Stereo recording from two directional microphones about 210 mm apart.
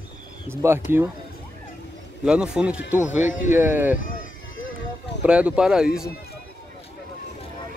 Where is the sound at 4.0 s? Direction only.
40° left (ahead or behind).